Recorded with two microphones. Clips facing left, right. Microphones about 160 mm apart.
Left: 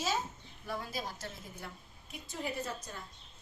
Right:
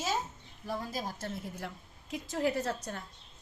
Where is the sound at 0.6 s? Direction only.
45° right (ahead or behind).